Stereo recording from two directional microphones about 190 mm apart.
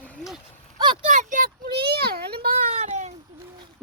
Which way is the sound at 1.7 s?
55° right (ahead or behind).